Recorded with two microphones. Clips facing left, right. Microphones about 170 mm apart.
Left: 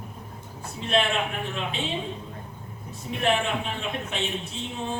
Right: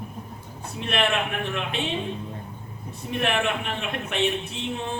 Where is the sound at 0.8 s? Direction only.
65° right (ahead or behind).